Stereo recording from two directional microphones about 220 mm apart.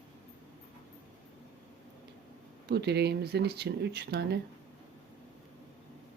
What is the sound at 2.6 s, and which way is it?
Speech, 50° right (ahead or behind).